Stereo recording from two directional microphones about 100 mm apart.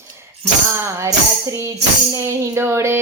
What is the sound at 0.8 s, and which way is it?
Music, 30° right (ahead or behind).